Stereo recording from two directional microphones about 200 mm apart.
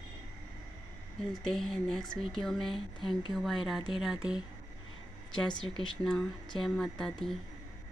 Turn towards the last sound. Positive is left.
turn(degrees=5)  # may be behind; listen again after turning